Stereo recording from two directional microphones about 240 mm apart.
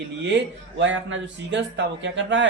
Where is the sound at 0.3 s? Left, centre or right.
Right.